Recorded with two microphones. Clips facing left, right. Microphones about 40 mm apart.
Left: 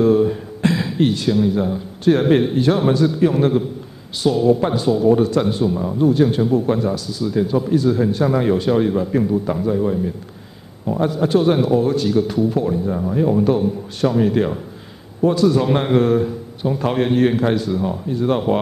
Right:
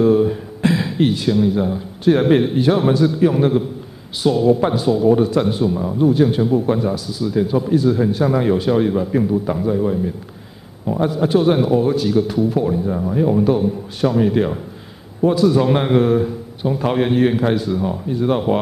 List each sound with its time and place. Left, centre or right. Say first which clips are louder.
0.0 s speech: even; centre